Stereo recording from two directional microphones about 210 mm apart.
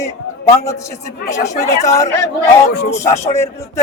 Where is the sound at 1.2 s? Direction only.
15° left (ahead or behind).